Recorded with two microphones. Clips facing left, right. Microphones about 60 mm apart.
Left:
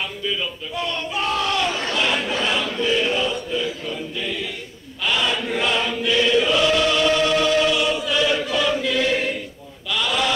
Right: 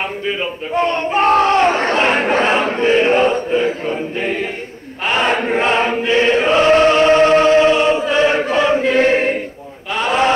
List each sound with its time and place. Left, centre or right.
0.3 s speech: right
5.0 s choir: right
9.9 s a sound: right